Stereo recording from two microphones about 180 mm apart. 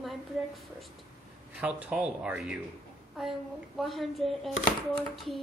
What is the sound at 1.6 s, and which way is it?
A woman's voice, 5° right (ahead or behind).